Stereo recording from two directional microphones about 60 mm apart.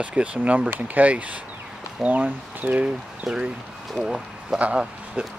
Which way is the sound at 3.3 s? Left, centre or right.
Centre.